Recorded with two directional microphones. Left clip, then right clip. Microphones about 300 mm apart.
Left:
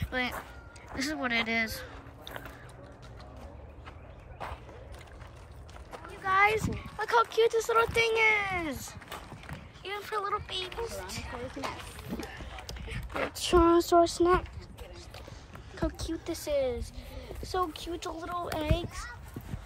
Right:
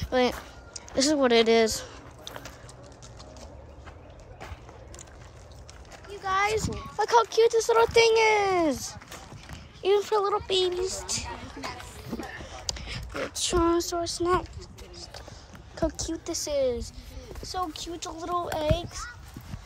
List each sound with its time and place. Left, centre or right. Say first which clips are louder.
0.0 s a sound: right 8 dB; centre
6.2 s speech: left 1 dB; centre
9.8 s speech: right 10 dB; centre
12.6 s a sound: right 8 dB; centre
13.3 s speech: left 1 dB; centre
15.7 s speech: right 5 dB; centre